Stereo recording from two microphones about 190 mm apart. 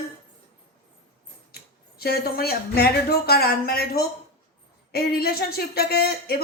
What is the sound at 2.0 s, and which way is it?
Speech, 55° left (ahead or behind).